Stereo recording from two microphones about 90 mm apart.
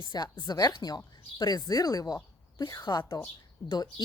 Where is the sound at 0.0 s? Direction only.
50° left (ahead or behind).